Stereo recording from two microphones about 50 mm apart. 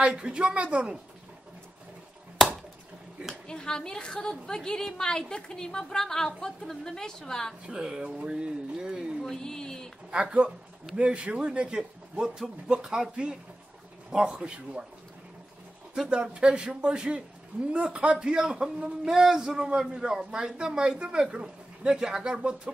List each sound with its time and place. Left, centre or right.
0.0 s speech: centre
3.4 s a woman's voice: centre
7.6 s a man's voice: centre
9.3 s a sound: centre
10.1 s a man's voice: right
15.9 s a man's voice: centre